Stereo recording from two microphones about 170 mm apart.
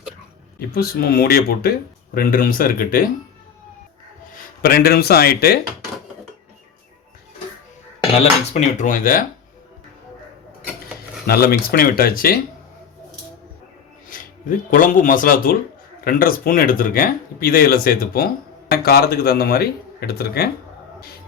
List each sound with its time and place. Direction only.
0.7 s speech: 65° left (ahead or behind)
2.1 s speech: 55° left (ahead or behind)
4.6 s speech: 65° left (ahead or behind)
8.2 s speech: 45° left (ahead or behind)
11.3 s speech: 65° left (ahead or behind)
14.1 s speech: 55° left (ahead or behind)